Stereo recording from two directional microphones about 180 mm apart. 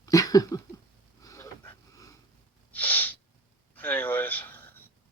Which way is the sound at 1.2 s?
20° left (ahead or behind).